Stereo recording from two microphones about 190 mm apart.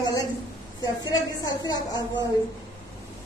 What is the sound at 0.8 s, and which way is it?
A woman's voice, 20° left (ahead or behind).